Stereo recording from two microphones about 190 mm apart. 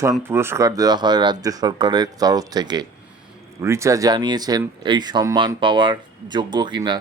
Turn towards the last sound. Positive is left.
turn(degrees=-25)  # may be behind; listen again after turning